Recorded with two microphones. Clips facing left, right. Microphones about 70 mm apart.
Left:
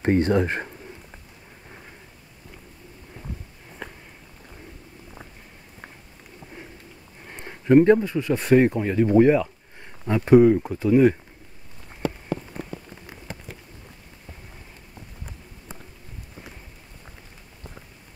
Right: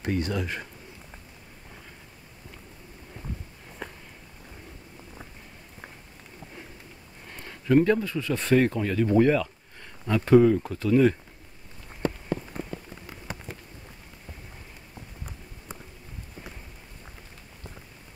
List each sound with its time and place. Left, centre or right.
0.0 s speech: left
7.2 s speech: left